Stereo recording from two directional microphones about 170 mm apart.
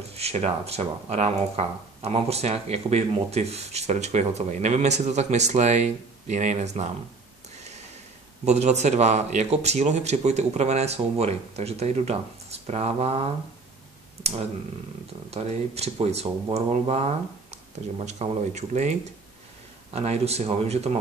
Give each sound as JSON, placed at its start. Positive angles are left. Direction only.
{"t": 0.1, "sound": "speech", "side_deg": -40}
{"t": 8.5, "sound": "speech", "side_deg": -40}
{"t": 15.3, "sound": "speech", "side_deg": -40}